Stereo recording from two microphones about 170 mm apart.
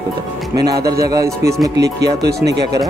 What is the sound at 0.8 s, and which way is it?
Speech, 65° right (ahead or behind).